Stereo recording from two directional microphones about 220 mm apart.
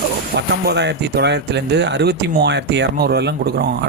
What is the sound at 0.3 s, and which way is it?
Speech, 50° right (ahead or behind).